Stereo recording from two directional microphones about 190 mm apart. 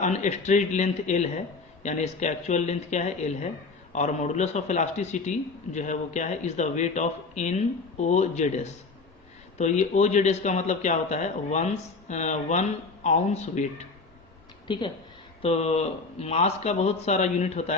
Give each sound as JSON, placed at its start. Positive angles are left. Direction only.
{"t": 0.0, "sound": "a man's voice", "side_deg": 40}
{"t": 14.7, "sound": "a man's voice", "side_deg": 25}